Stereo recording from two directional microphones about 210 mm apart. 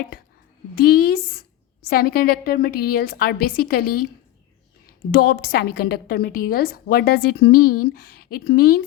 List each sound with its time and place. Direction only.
0.8 s a woman's voice: 45° left (ahead or behind)
5.1 s a woman's voice: 50° left (ahead or behind)